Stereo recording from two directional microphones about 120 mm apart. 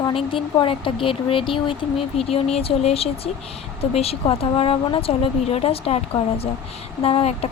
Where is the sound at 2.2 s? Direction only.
55° left (ahead or behind).